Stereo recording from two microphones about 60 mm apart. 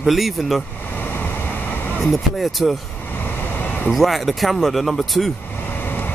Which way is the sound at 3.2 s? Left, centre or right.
Left.